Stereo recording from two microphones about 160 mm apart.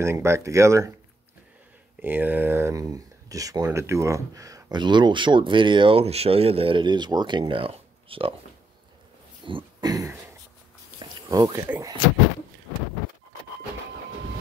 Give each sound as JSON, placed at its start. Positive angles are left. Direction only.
{"t": 0.0, "sound": "speech", "side_deg": -15}
{"t": 2.0, "sound": "speech", "side_deg": -10}
{"t": 9.5, "sound": "throat clearing", "side_deg": -30}
{"t": 11.0, "sound": "a sound", "side_deg": -25}